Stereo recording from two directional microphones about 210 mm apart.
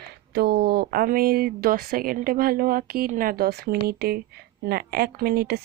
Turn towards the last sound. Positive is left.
turn(degrees=-50)  # may be behind; listen again after turning